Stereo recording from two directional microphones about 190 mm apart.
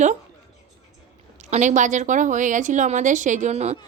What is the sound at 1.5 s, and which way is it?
A woman's voice, 40° right (ahead or behind).